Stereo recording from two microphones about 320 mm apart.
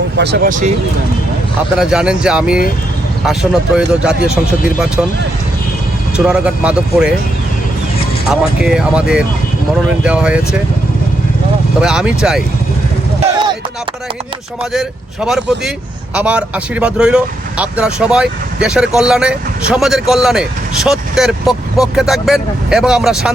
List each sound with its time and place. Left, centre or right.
0.2 s speech: right
1.8 s speech: centre
6.1 s speech: centre
8.3 s speech: centre
11.8 s speech: centre
13.2 s a sound: centre
14.6 s speech: centre